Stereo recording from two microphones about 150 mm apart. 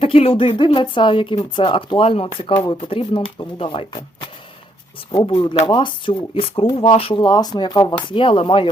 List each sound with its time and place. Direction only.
0.0 s speech: 40° left (ahead or behind)